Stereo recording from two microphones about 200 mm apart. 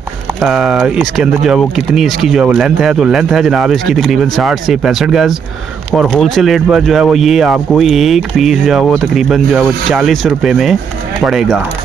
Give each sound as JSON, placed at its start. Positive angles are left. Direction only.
{"t": 0.4, "sound": "speech", "side_deg": -5}